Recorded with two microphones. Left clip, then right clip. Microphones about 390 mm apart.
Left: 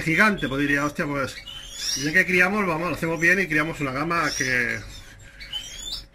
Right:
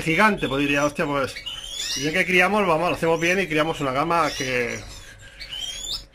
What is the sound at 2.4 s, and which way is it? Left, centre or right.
Speech, centre.